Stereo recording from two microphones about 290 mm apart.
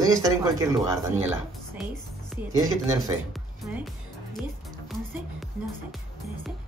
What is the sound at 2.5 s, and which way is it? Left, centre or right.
Speech, centre.